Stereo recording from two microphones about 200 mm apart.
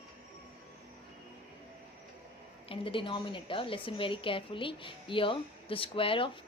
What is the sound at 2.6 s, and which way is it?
A woman's voice, 25° left (ahead or behind).